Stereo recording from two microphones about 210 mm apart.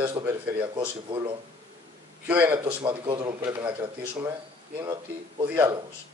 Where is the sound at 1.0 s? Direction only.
25° right (ahead or behind).